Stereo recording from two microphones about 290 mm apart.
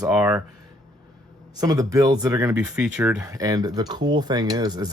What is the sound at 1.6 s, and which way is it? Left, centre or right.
Speech, centre.